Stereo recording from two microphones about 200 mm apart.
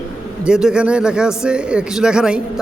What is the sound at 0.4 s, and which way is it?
A man's voice, 5° right (ahead or behind).